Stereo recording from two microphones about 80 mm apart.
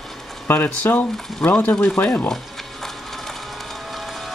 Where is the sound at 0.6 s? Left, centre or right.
Left.